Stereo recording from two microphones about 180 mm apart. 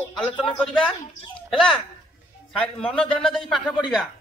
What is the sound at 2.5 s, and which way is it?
A man's voice, 5° left (ahead or behind).